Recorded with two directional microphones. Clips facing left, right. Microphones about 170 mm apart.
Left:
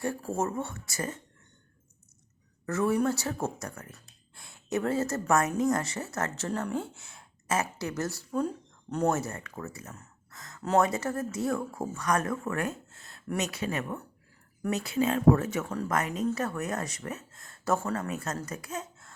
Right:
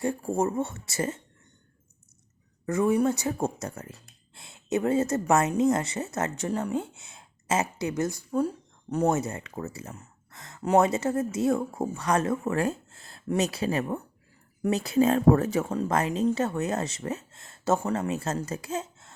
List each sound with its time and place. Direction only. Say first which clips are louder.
0.0 s speech: right 4 dB; 15° right (ahead or behind)
2.6 s a woman's voice: right 3 dB; 15° right (ahead or behind)